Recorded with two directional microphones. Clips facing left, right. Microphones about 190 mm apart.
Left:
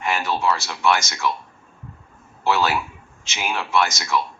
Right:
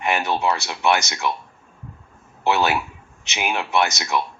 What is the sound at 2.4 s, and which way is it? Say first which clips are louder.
Speech: right 1 dB; 20° right (ahead or behind).